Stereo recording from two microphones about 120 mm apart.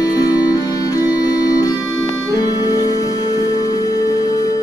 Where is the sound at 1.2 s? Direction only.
30° left (ahead or behind).